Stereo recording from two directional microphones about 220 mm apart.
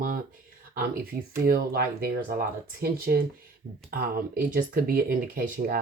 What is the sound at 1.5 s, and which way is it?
Speech, 40° right (ahead or behind).